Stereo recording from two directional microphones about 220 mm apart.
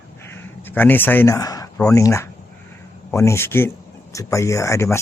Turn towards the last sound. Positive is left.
turn(degrees=15)  # may be behind; listen again after turning